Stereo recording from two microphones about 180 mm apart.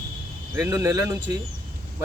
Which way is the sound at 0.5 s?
15° right (ahead or behind).